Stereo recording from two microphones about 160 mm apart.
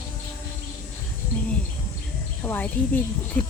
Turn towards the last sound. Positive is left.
turn(degrees=10)  # may be behind; listen again after turning